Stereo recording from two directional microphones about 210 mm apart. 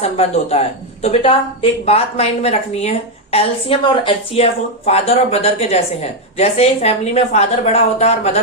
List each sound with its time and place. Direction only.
0.0 s speech: 30° left (ahead or behind)